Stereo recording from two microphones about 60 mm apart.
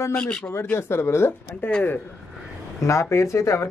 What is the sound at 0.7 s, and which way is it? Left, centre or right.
Speech, left.